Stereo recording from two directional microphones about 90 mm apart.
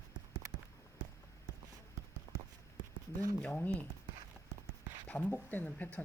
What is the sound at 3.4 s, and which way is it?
Speech, 15° left (ahead or behind).